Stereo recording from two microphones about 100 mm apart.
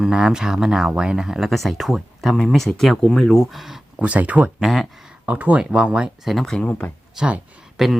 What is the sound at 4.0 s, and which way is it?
Speech, 15° right (ahead or behind).